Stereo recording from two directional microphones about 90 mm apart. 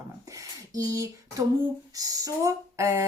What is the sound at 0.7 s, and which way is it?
Speech, 40° right (ahead or behind).